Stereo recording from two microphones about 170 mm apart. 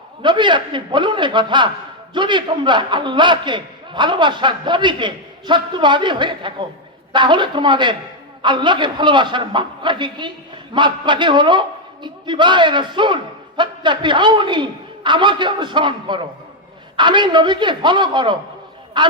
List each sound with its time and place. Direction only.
0.2 s a man's voice: 25° right (ahead or behind)